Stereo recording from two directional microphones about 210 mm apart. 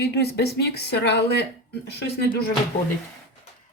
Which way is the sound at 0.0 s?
50° left (ahead or behind).